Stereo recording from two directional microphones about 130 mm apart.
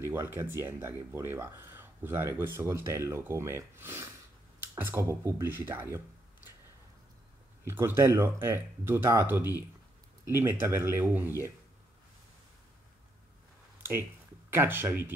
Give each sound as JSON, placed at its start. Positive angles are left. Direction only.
{"t": 0.0, "sound": "speech", "side_deg": -20}
{"t": 7.6, "sound": "speech", "side_deg": -20}
{"t": 14.5, "sound": "speech", "side_deg": -15}